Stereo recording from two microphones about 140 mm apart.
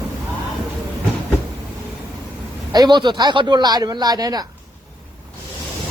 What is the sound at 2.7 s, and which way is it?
Speech, 30° right (ahead or behind).